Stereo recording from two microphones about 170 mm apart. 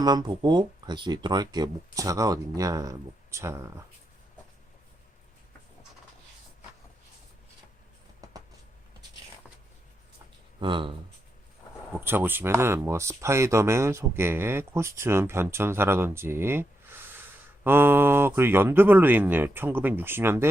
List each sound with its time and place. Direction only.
0.0 s speech: 25° right (ahead or behind)
8.2 s a sound: 20° right (ahead or behind)
10.6 s speech: 30° right (ahead or behind)
11.9 s speech: 10° right (ahead or behind)